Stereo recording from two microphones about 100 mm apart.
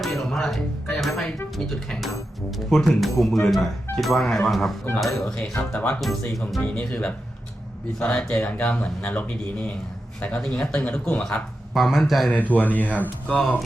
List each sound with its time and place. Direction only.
0.0 s speech: centre (ahead or behind)
6.0 s speech: centre (ahead or behind)
6.6 s speech: 15° left (ahead or behind)
11.7 s speech: centre (ahead or behind)
12.3 s speech: 15° left (ahead or behind)